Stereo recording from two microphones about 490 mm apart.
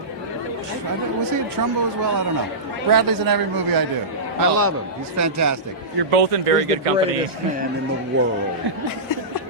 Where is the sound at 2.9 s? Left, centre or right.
Right.